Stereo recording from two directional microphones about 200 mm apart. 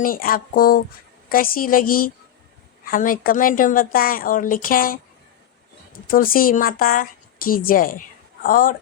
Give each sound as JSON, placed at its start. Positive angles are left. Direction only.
{"t": 0.0, "sound": "speech", "side_deg": 45}